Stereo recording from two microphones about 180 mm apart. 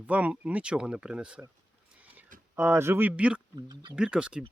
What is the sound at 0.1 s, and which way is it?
Speech, 10° right (ahead or behind).